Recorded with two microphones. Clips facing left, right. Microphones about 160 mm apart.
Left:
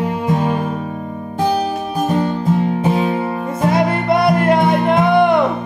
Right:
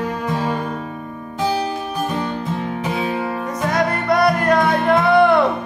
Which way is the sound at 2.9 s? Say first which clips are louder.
Left 4 dB; 40° left (ahead or behind).